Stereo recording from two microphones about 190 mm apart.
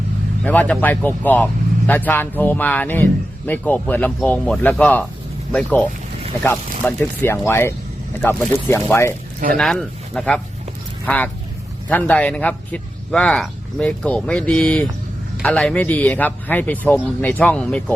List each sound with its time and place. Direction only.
0.4 s a man's voice: 10° left (ahead or behind)
9.6 s a man's voice: centre (ahead or behind)